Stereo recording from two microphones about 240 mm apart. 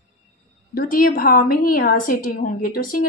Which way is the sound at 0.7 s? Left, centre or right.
Left.